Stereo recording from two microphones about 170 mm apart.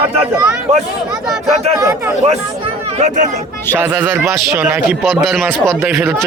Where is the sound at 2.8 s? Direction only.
40° right (ahead or behind).